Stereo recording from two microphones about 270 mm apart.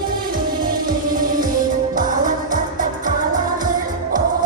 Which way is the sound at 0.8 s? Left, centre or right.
Right.